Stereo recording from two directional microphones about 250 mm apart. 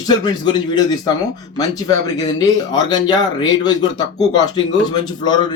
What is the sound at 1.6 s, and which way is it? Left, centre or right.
Speech, centre.